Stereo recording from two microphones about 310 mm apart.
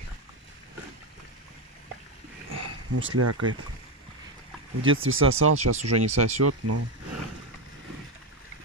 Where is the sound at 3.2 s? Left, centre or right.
Right.